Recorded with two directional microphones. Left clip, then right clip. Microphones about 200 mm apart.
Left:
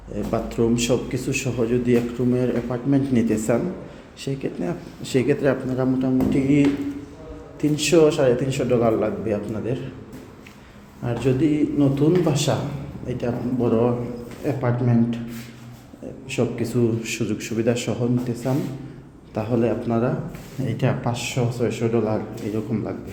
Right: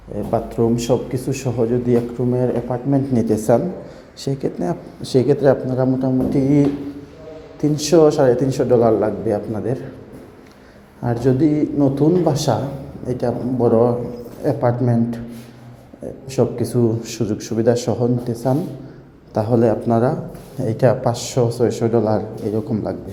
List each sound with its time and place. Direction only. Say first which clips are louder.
0.3 s a man's voice: right 4 dB; centre (ahead or behind)
7.6 s speech: right 3 dB; 10° right (ahead or behind)
11.0 s speech: right 4 dB; 15° right (ahead or behind)
16.3 s speech: right 5 dB; 10° right (ahead or behind)